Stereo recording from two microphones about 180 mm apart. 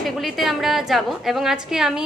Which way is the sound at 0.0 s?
Centre (ahead or behind).